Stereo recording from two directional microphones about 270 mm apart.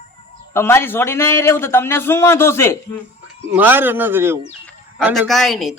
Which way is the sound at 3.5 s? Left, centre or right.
Centre.